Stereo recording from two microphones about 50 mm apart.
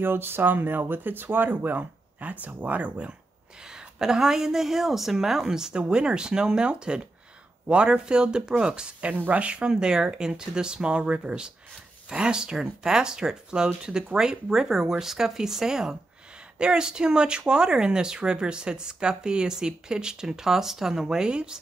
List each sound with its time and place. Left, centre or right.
0.0 s speech: right
3.6 s speech: centre